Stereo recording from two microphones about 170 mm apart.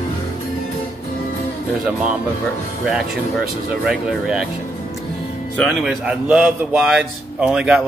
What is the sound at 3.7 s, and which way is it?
Speech, 5° right (ahead or behind).